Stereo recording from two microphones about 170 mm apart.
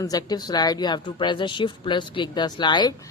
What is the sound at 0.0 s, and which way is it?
Speech, 20° left (ahead or behind).